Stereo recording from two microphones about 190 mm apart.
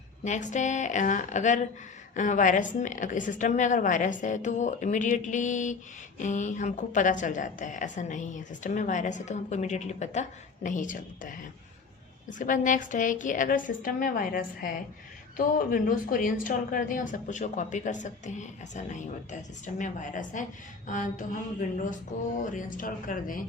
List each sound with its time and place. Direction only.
0.3 s a woman's voice: 40° left (ahead or behind)
22.4 s a woman's voice: 45° left (ahead or behind)